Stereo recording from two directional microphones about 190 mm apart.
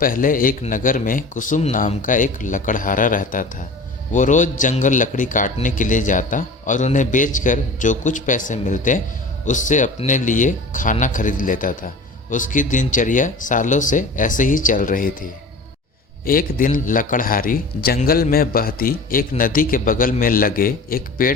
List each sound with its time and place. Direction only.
0.0 s a man's voice: 45° left (ahead or behind)